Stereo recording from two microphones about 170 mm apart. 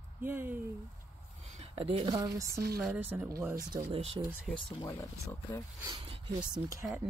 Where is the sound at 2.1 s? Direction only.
20° right (ahead or behind).